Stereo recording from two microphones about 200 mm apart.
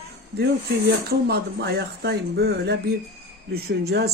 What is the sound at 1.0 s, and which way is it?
Speech, 50° right (ahead or behind).